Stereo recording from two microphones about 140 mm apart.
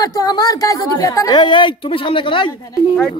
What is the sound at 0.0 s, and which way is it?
A woman's voice, 25° left (ahead or behind).